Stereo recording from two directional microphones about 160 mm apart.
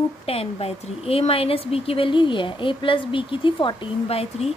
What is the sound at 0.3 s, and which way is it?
A woman's voice, 35° left (ahead or behind).